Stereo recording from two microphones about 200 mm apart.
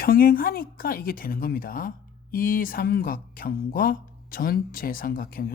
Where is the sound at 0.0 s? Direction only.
45° left (ahead or behind).